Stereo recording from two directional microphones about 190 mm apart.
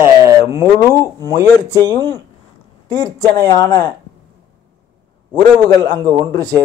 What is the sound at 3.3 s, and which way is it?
Speech, 15° left (ahead or behind).